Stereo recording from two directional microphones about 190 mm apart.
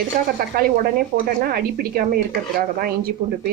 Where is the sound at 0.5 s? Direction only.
50° right (ahead or behind).